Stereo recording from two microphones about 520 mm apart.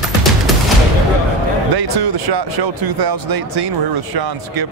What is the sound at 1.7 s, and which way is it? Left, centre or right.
Speech, right.